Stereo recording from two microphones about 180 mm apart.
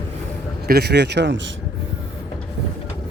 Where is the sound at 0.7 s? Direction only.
65° right (ahead or behind); by 1.4 s 80° right.